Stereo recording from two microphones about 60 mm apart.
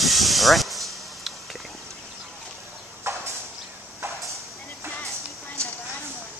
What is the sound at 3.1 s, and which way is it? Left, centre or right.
Clip-clop, right.